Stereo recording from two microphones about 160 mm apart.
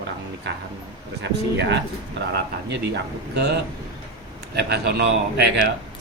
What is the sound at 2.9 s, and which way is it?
Speech, 90° right.